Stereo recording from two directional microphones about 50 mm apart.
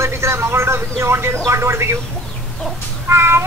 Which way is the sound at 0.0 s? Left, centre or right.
Right.